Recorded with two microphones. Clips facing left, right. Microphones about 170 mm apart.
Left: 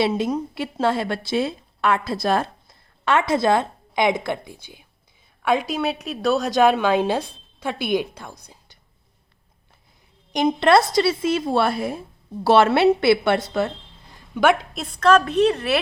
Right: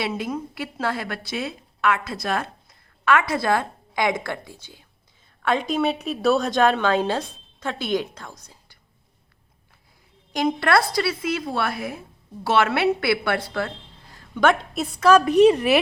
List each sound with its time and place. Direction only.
0.0 s a woman's voice: 25° left (ahead or behind)
10.3 s a woman's voice: 20° left (ahead or behind); by 15.8 s 10° right (ahead or behind)